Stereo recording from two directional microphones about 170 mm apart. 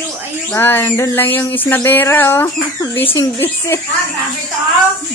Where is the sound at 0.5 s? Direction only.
10° left (ahead or behind).